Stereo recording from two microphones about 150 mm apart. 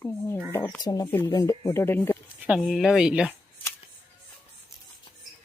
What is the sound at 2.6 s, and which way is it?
Speech, centre (ahead or behind).